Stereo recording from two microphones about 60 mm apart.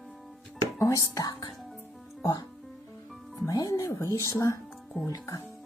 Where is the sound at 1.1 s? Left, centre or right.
Left.